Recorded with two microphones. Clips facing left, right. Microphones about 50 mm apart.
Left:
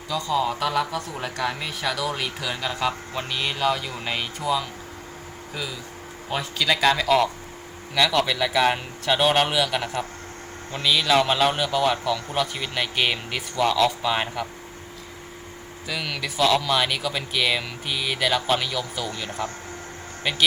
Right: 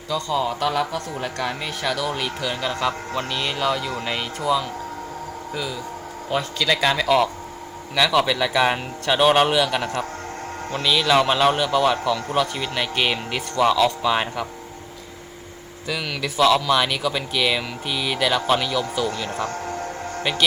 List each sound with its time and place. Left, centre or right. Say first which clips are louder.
0.1 s a man's voice: right 1 dB; centre
6.3 s a man's voice: right 2 dB; centre
15.9 s a man's voice: right 3 dB; centre
19.5 s music: right 8 dB; right